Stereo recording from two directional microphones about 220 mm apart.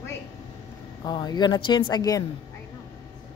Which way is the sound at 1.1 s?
20° left (ahead or behind).